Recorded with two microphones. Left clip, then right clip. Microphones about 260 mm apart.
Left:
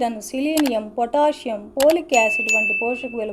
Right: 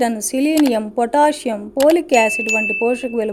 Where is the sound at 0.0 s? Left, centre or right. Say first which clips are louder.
Right 5 dB; right.